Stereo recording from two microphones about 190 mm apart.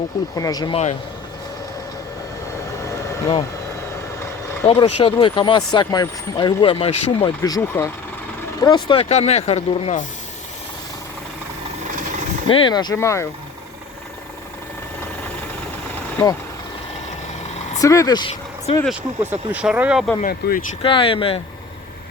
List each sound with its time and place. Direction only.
0.3 s speech: 20° left (ahead or behind)
2.8 s vehicle: 20° left (ahead or behind)
4.6 s speech: 30° left (ahead or behind)
7.4 s speech: 20° left (ahead or behind); by 10.1 s 35° left (ahead or behind)
12.5 s speech: 25° left (ahead or behind)
17.7 s speech: 15° left (ahead or behind)
18.9 s speech: 10° right (ahead or behind)
20.2 s speech: 50° left (ahead or behind)
20.8 s speech: 30° left (ahead or behind)